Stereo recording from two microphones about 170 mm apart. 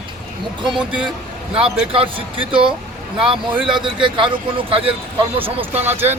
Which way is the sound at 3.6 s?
30° right (ahead or behind).